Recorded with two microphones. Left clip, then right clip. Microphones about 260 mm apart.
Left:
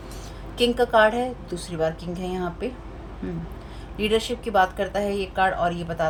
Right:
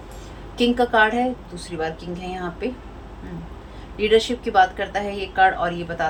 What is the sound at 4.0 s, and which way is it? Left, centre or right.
Speech, left.